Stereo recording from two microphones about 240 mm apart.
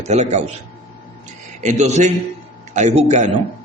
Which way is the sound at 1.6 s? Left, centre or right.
Right.